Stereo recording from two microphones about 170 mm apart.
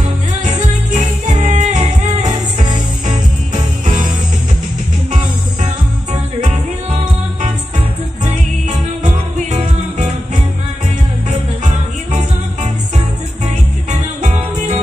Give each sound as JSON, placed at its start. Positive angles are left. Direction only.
{"t": 0.4, "sound": "music", "side_deg": -45}
{"t": 2.6, "sound": "music", "side_deg": -25}
{"t": 9.0, "sound": "music", "side_deg": -45}
{"t": 11.2, "sound": "music", "side_deg": -40}
{"t": 13.8, "sound": "music", "side_deg": -45}